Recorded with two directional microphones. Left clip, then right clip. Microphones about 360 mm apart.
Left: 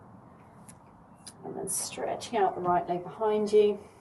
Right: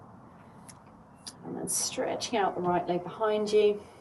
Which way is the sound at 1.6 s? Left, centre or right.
Centre.